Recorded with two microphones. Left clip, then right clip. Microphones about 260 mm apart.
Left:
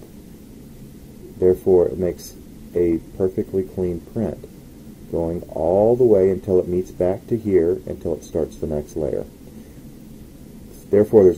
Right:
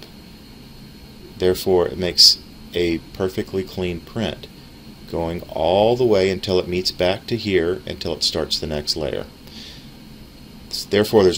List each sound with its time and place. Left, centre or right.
1.4 s speech: right
6.1 s speech: right
10.9 s speech: right